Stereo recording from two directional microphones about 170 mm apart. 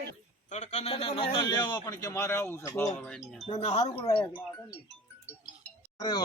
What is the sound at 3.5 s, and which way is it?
Speech, 40° left (ahead or behind).